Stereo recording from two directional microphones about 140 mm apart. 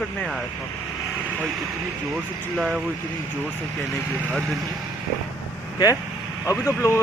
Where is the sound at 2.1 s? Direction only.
5° right (ahead or behind).